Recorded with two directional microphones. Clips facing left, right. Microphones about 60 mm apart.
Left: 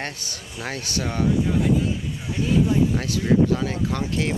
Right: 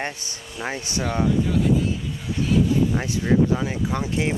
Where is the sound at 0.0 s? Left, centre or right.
Centre.